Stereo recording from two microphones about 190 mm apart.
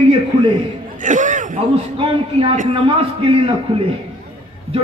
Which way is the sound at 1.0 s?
40° right (ahead or behind).